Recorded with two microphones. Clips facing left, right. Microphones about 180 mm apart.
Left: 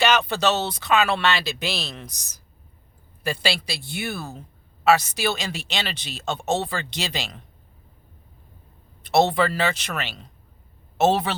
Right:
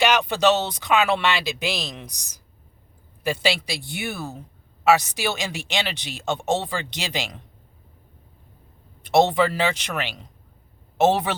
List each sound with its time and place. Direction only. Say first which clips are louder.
0.0 s speech: right 1 dB; 15° right (ahead or behind)
9.0 s speech: right 1 dB; 15° right (ahead or behind)